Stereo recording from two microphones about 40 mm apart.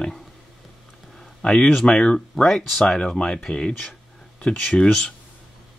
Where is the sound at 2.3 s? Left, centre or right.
Centre.